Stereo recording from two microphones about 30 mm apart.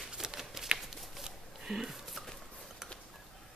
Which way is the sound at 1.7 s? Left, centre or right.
Centre.